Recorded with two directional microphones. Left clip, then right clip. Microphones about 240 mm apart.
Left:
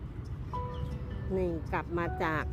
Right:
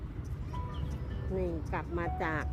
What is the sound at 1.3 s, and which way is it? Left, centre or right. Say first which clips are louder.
Speech: left 3 dB; left.